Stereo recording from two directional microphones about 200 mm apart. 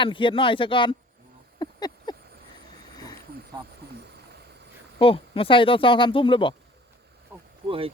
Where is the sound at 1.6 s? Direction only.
20° left (ahead or behind).